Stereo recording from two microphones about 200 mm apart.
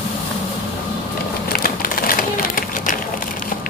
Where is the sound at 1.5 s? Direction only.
45° left (ahead or behind).